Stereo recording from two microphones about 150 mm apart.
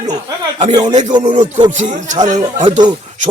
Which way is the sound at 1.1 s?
30° right (ahead or behind).